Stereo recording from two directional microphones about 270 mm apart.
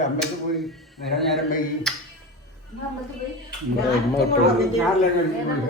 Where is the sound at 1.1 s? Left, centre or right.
Centre.